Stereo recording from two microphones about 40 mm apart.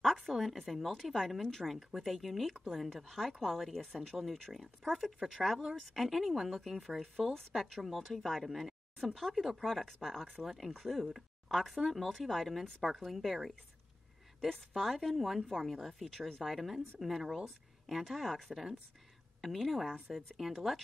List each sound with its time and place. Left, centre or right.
0.0 s speech: centre
7.2 s speech: centre
7.7 s speech: centre
14.5 s speech: centre
16.4 s speech: centre